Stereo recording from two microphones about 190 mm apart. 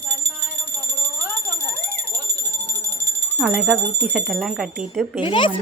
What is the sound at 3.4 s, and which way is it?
Speech, 5° right (ahead or behind).